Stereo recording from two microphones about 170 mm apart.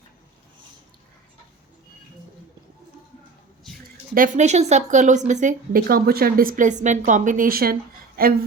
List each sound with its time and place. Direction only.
4.1 s a woman's voice: 50° right (ahead or behind)